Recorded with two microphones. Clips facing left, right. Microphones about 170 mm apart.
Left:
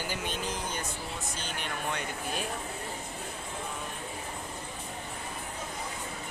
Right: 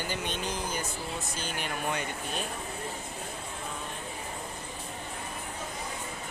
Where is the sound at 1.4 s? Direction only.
5° right (ahead or behind).